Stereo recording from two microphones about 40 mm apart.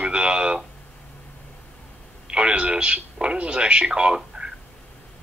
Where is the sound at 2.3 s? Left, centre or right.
Right.